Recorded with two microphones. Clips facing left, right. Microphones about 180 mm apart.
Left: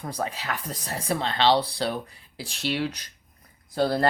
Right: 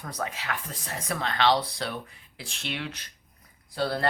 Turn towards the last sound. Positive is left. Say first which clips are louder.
# left 5 dB
turn(degrees=40)  # may be behind; listen again after turning